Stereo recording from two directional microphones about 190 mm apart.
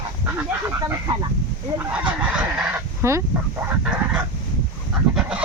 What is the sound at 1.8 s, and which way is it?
Fowl, 5° right (ahead or behind).